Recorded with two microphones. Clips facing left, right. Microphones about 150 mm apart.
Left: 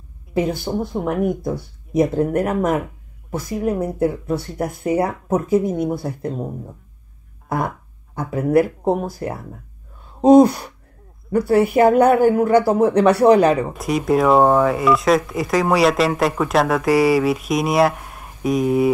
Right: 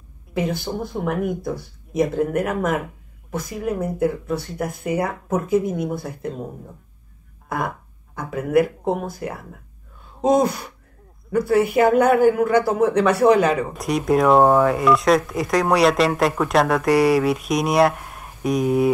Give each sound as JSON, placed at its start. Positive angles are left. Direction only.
{"t": 0.7, "sound": "speech", "side_deg": 15}
{"t": 1.0, "sound": "a woman's voice", "side_deg": 25}
{"t": 7.4, "sound": "speech", "side_deg": 30}
{"t": 10.2, "sound": "a woman's voice", "side_deg": 30}
{"t": 13.7, "sound": "speech", "side_deg": 0}